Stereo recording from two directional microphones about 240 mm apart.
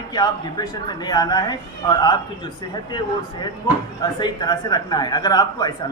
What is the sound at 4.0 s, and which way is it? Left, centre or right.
Speech, centre.